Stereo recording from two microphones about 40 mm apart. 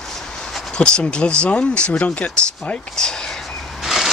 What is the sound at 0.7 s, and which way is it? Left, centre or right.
Speech, left.